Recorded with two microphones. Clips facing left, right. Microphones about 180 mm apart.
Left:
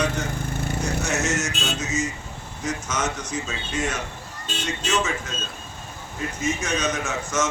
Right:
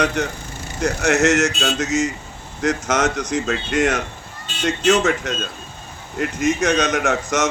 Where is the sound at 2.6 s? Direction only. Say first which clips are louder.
Right 8 dB; 75° right (ahead or behind).